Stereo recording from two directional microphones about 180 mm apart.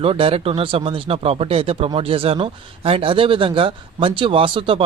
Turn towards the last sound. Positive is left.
turn(degrees=-30)  # may be behind; listen again after turning